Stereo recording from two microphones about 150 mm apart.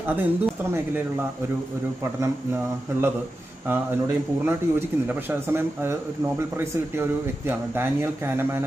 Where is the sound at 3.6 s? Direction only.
15° right (ahead or behind).